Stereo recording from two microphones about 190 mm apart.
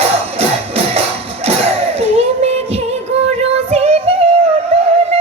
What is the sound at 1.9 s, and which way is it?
Music, 30° right (ahead or behind).